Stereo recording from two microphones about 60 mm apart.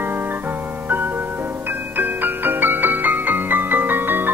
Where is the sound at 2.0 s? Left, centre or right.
Right.